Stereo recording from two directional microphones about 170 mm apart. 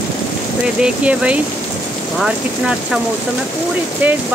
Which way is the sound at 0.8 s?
5° right (ahead or behind).